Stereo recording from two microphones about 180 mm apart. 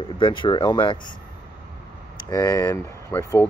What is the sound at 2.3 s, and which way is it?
Speech, 20° left (ahead or behind).